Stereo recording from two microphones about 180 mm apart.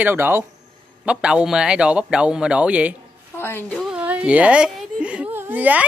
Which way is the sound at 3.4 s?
10° left (ahead or behind).